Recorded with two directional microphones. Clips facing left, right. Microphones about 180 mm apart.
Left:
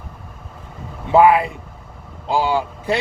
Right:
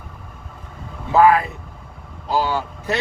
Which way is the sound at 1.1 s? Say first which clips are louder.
Left 2 dB; 15° left (ahead or behind).